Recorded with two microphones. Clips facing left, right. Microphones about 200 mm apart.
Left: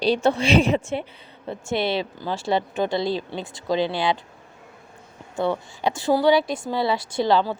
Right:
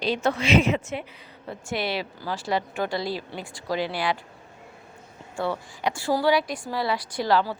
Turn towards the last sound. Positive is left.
turn(degrees=25)  # may be behind; listen again after turning